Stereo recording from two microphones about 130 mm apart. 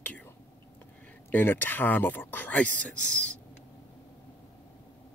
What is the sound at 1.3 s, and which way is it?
Speech, 15° left (ahead or behind).